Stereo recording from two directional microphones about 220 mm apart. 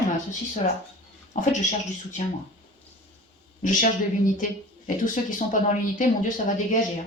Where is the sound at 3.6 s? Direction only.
35° left (ahead or behind).